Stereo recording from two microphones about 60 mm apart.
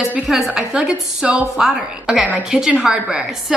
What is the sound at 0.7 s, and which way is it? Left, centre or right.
A woman's voice, centre.